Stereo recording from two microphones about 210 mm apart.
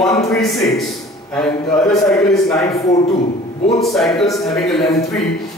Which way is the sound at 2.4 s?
15° left (ahead or behind).